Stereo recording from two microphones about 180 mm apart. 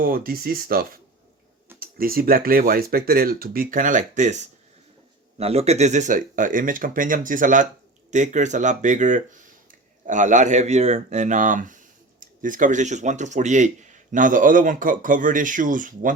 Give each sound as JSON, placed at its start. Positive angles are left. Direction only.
{"t": 0.0, "sound": "speech", "side_deg": -55}